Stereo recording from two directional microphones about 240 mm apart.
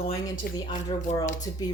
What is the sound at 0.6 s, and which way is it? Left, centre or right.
Speech, centre.